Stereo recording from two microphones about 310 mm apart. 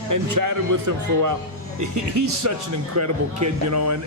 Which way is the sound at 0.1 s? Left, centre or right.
Right.